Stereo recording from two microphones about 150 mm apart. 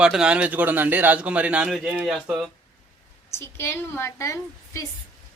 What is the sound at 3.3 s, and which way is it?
A woman's voice, 15° left (ahead or behind).